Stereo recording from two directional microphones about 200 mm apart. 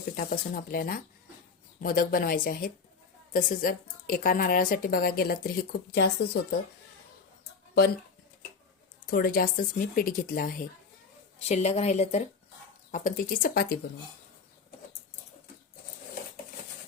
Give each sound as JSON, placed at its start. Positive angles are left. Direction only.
{"t": 0.2, "sound": "a woman's voice", "side_deg": 45}
{"t": 5.9, "sound": "speech", "side_deg": 55}
{"t": 9.0, "sound": "a woman's voice", "side_deg": 50}
{"t": 11.4, "sound": "a woman's voice", "side_deg": 30}
{"t": 12.9, "sound": "a woman's voice", "side_deg": 45}